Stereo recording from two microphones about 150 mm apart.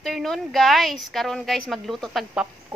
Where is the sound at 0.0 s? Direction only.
Centre (ahead or behind).